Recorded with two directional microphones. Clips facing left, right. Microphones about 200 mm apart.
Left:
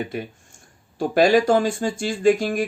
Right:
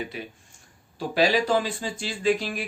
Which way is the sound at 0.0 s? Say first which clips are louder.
Left 6 dB; 50° left (ahead or behind).